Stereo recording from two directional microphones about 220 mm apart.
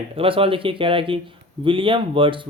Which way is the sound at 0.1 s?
25° right (ahead or behind).